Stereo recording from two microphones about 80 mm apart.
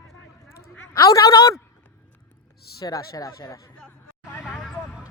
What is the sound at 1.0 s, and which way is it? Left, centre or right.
Speech, left.